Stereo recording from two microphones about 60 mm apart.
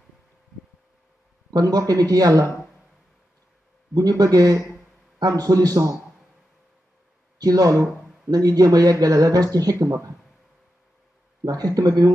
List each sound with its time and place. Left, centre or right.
1.5 s speech: right
3.9 s a man's voice: right
7.3 s speech: right
11.4 s speech: right